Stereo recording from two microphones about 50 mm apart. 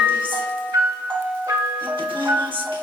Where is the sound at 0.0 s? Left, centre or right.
Right.